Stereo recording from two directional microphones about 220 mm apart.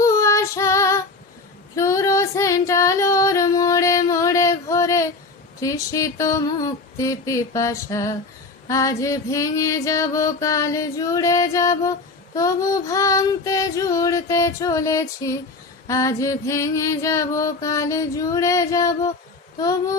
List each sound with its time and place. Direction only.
0.0 s child singing: 15° left (ahead or behind)
1.7 s female singing: 15° left (ahead or behind)
5.5 s music: 15° left (ahead or behind)